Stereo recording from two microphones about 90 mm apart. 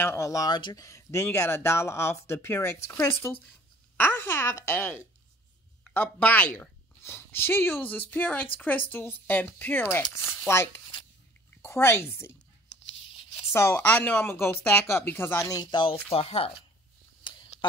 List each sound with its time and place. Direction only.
0.0 s speech: 35° left (ahead or behind)
0.5 s speech: 55° left (ahead or behind)
0.8 s speech: 35° left (ahead or behind)
3.9 s a woman's voice: 20° left (ahead or behind)
13.1 s a sound: 90° left
13.5 s speech: 30° left (ahead or behind)
13.8 s speech: 20° left (ahead or behind)
15.4 s speech: 50° left (ahead or behind); by 16.5 s 90° left
17.2 s a sound: 60° left (ahead or behind)